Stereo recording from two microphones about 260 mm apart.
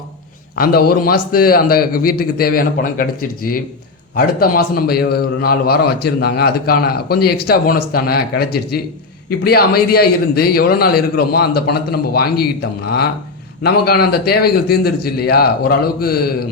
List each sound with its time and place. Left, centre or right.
0.5 s a man's voice: left